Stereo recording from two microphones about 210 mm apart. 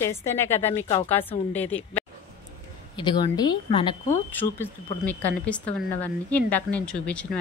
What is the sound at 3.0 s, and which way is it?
Speech, 20° left (ahead or behind).